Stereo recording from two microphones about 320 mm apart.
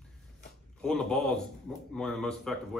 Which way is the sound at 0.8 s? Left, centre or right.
Centre.